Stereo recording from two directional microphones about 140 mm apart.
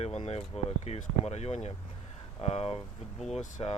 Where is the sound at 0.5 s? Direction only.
45° left (ahead or behind).